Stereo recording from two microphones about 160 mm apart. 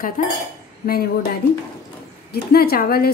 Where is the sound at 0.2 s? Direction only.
55° left (ahead or behind).